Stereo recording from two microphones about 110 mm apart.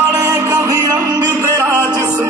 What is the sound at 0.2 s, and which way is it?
Music, 30° right (ahead or behind).